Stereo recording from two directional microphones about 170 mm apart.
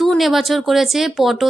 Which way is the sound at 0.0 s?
Centre (ahead or behind).